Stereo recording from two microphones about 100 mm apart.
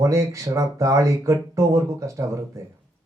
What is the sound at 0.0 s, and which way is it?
Speech, 30° right (ahead or behind).